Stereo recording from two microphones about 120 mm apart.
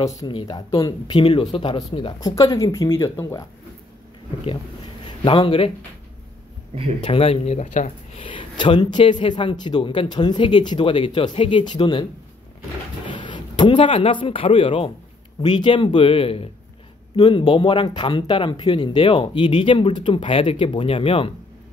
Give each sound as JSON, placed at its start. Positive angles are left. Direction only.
{"t": 0.3, "sound": "speech", "side_deg": 40}
{"t": 1.2, "sound": "speech", "side_deg": 55}
{"t": 2.3, "sound": "speech", "side_deg": 30}
{"t": 5.0, "sound": "a man's voice", "side_deg": 45}
{"t": 7.0, "sound": "speech", "side_deg": 50}
{"t": 7.5, "sound": "speech", "side_deg": 75}
{"t": 8.2, "sound": "a man's voice", "side_deg": 45}
{"t": 17.1, "sound": "speech", "side_deg": 40}